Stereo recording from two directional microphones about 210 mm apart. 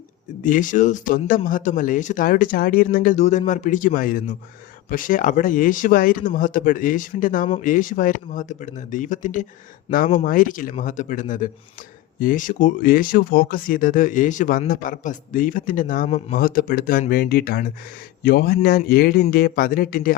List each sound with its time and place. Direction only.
0.4 s a man's voice: 40° left (ahead or behind)